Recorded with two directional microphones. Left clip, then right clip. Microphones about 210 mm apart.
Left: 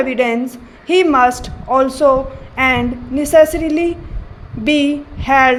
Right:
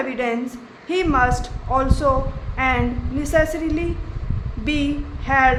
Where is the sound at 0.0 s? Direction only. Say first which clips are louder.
Left 7 dB; 30° left (ahead or behind).